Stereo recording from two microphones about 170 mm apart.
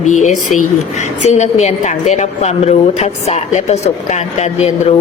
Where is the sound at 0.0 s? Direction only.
45° left (ahead or behind).